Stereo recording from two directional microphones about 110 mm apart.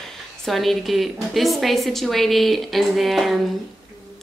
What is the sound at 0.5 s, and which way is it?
Speech, centre (ahead or behind).